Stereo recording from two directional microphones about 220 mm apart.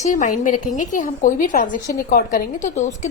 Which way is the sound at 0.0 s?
35° left (ahead or behind).